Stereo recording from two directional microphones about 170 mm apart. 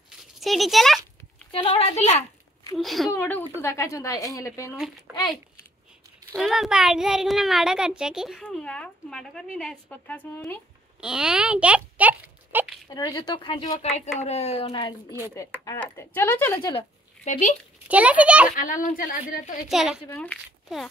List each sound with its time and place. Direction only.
0.4 s a sound: centre (ahead or behind)
1.5 s speech: 30° left (ahead or behind)
2.7 s a child's voice: centre (ahead or behind)
3.1 s speech: 10° left (ahead or behind)
4.7 s a child's voice: 5° right (ahead or behind)
6.3 s a child's voice: centre (ahead or behind)
11.0 s a child's voice: 5° right (ahead or behind)
12.9 s speech: 25° left (ahead or behind)
14.7 s speech: 25° left (ahead or behind)
16.5 s speech: 30° left (ahead or behind)
17.2 s speech: 50° left (ahead or behind)
17.8 s a child's voice: 10° right (ahead or behind)
18.6 s a woman's voice: 50° left (ahead or behind)
19.7 s a child's voice: centre (ahead or behind)